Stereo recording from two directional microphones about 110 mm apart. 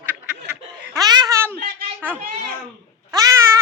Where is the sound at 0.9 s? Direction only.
35° right (ahead or behind).